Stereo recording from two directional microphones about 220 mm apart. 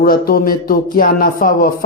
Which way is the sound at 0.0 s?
40° left (ahead or behind).